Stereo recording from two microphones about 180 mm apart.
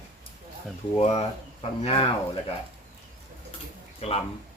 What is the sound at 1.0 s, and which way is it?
Speech, 35° left (ahead or behind).